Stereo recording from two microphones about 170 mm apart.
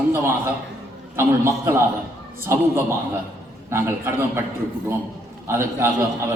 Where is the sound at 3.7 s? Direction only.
15° right (ahead or behind).